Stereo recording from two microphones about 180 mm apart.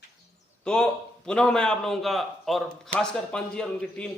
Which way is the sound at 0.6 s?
5° left (ahead or behind).